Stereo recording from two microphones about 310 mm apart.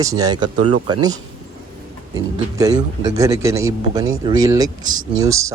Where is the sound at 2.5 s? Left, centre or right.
Centre.